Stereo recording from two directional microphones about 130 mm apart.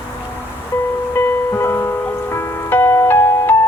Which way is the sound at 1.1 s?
20° left (ahead or behind).